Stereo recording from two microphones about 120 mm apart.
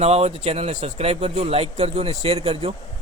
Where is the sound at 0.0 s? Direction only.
60° right (ahead or behind).